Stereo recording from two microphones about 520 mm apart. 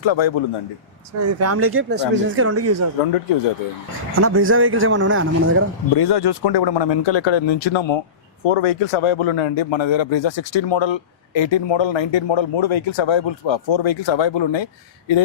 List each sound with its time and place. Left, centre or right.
0.0 s speech: left
1.2 s speech: right
4.1 s speech: right
6.0 s speech: left
8.4 s speech: left